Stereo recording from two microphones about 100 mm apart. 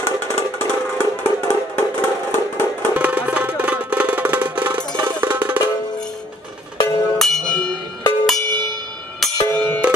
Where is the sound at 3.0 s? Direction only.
15° right (ahead or behind).